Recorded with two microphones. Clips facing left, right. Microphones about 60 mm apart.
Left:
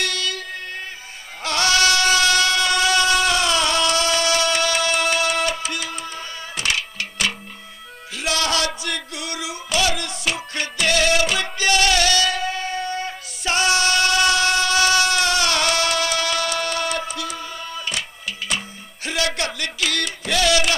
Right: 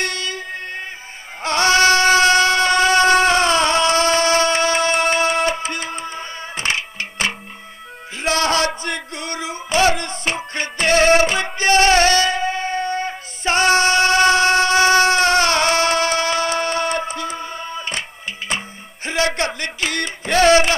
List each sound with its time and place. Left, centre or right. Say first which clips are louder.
0.0 s music: right 1 dB; right
1.4 s train: right 4 dB; right
8.2 s music: right 4 dB; right
13.4 s train: right 4 dB; right
18.5 s music: right 2 dB; right
19.0 s a sound: right 4 dB; right